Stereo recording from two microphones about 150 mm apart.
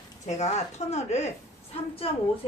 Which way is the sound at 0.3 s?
50° left (ahead or behind).